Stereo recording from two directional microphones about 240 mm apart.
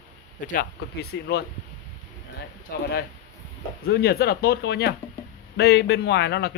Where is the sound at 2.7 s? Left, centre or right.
Left.